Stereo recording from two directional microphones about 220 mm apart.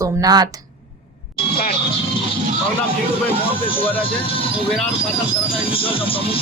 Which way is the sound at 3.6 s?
25° left (ahead or behind).